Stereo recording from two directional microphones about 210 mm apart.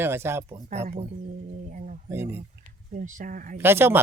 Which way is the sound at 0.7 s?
30° right (ahead or behind).